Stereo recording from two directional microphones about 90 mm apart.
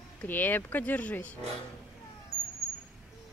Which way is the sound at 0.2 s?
20° left (ahead or behind).